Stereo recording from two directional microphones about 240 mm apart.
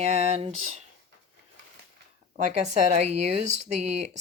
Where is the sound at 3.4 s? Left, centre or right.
Right.